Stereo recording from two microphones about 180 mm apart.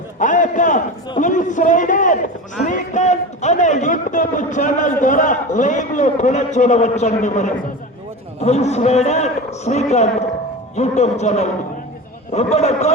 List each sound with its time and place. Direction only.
0.2 s a man's voice: 45° left (ahead or behind)